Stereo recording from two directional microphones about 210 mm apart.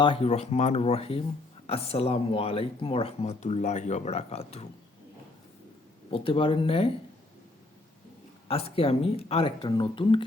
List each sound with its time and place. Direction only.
0.0 s speech: 25° left (ahead or behind)
6.1 s speech: 25° left (ahead or behind)
8.4 s speech: 30° left (ahead or behind)